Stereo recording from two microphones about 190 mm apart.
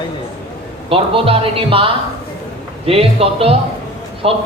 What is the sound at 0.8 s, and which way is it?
A man's voice, 30° right (ahead or behind).